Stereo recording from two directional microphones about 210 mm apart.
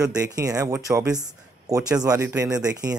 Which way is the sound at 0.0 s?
15° right (ahead or behind).